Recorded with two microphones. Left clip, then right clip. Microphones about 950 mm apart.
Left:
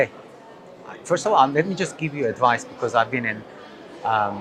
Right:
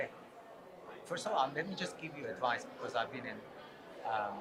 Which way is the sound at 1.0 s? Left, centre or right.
Left.